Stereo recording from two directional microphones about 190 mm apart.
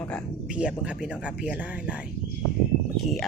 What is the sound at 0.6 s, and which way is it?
Speech, 5° right (ahead or behind).